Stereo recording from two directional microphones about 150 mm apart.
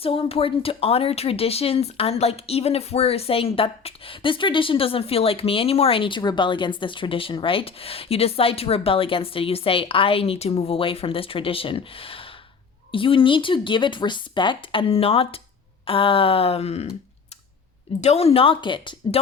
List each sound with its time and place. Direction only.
0.0 s speech: 40° left (ahead or behind)
18.0 s speech: 45° left (ahead or behind)